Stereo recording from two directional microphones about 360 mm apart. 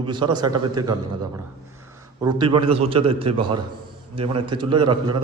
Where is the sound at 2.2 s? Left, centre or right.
Centre.